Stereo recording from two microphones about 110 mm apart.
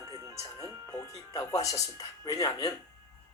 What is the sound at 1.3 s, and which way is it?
Speech, 30° left (ahead or behind).